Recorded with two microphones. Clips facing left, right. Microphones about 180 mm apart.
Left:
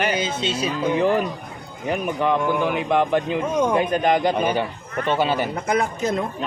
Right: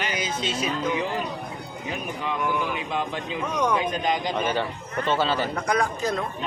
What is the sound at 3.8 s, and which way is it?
Speech, 55° left (ahead or behind).